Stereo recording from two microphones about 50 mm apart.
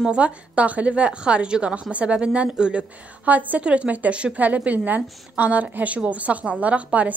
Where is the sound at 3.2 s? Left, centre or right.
Right.